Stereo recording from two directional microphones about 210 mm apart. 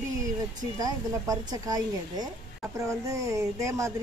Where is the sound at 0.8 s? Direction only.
20° right (ahead or behind).